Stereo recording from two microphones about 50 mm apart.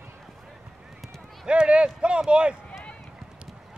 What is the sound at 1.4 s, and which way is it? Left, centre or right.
A man's voice, centre.